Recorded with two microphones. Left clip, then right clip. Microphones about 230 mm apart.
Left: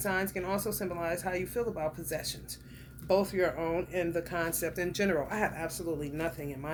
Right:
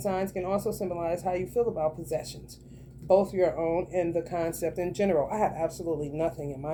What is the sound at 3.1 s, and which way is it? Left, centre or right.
Speech, left.